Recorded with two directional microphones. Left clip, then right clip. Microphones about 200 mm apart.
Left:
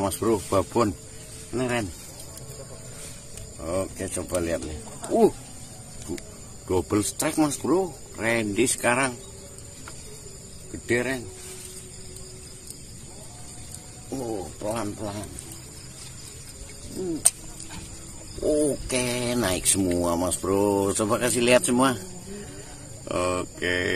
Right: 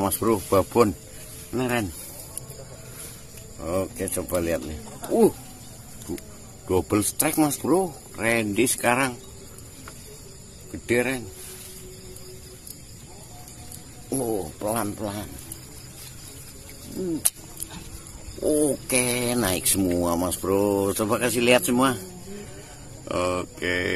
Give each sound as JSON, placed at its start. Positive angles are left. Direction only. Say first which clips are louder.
{"t": 0.0, "sound": "speech", "louder": "right 1 dB", "side_deg": -30}
{"t": 3.6, "sound": "speech", "louder": "right 2 dB", "side_deg": -30}
{"t": 6.7, "sound": "speech", "louder": "right 1 dB", "side_deg": -25}
{"t": 10.9, "sound": "speech", "louder": "right 2 dB", "side_deg": -35}
{"t": 14.1, "sound": "speech", "louder": "right 4 dB", "side_deg": -55}
{"t": 14.6, "sound": "speech", "louder": "right 2 dB", "side_deg": -40}
{"t": 18.7, "sound": "a man's voice", "louder": "right 2 dB", "side_deg": -25}
{"t": 20.5, "sound": "a man's voice", "louder": "right 1 dB", "side_deg": -5}